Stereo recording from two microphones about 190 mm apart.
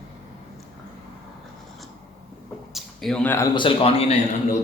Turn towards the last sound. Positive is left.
turn(degrees=35)  # may be behind; listen again after turning